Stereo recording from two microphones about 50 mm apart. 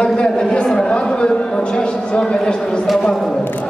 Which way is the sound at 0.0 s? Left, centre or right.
Centre.